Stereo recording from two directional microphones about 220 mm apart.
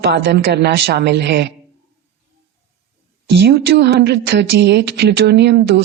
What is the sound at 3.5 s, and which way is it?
A woman's voice, 50° right (ahead or behind).